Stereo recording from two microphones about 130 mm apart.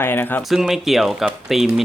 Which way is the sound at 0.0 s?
15° left (ahead or behind).